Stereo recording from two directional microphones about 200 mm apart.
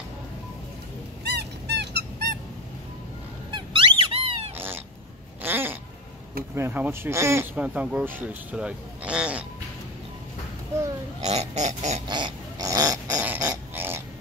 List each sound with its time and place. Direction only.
1.2 s dog: 55° right (ahead or behind)
3.5 s squeak: 25° right (ahead or behind)
4.6 s cat: 10° right (ahead or behind)
6.5 s speech: 10° right (ahead or behind)
11.2 s pig: 35° right (ahead or behind)
12.1 s pig: 20° right (ahead or behind)